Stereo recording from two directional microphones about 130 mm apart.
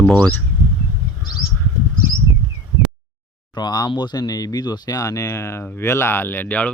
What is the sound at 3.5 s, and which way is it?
Speech, 30° left (ahead or behind).